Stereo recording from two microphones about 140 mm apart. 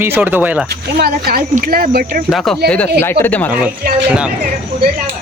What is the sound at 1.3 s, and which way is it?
Speech, 90° right.